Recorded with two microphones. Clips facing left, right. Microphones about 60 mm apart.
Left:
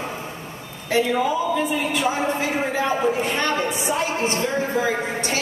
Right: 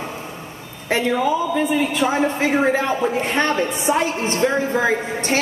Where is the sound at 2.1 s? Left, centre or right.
Right.